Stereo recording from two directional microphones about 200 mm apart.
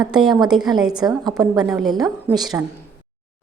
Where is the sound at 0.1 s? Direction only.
Centre (ahead or behind).